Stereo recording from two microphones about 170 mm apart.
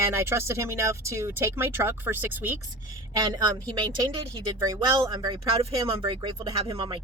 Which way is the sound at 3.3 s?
20° right (ahead or behind).